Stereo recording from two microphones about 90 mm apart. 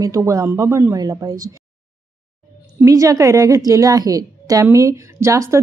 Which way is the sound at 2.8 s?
40° right (ahead or behind).